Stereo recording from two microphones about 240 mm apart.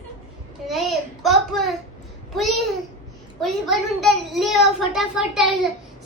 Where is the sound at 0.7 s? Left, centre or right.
Centre.